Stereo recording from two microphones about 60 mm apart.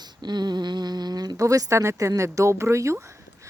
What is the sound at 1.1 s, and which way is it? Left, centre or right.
Speech, right.